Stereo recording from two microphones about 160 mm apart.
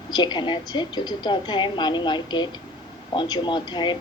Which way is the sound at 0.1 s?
30° left (ahead or behind).